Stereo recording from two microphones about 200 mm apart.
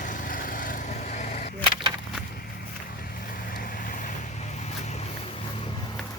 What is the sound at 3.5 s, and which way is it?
Vehicle, 45° left (ahead or behind).